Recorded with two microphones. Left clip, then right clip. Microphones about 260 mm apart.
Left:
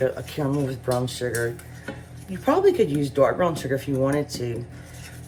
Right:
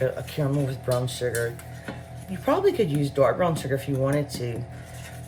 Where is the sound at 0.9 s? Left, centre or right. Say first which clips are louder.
Even; centre.